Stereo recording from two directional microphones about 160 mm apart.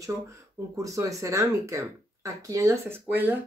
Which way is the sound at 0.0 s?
20° right (ahead or behind).